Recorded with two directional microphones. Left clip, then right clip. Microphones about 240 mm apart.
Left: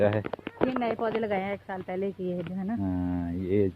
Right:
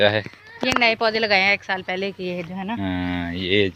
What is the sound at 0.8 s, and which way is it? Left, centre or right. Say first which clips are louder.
Speech: right 10 dB; centre.